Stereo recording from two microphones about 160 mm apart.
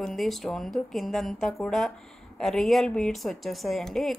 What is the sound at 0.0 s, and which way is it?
A woman's voice, centre (ahead or behind).